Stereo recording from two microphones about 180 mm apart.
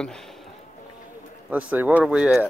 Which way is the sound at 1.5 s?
10° right (ahead or behind).